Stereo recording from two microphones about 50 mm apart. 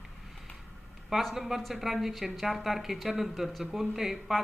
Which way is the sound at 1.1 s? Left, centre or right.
Centre.